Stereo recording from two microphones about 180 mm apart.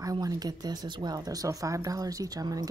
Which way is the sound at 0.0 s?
20° right (ahead or behind).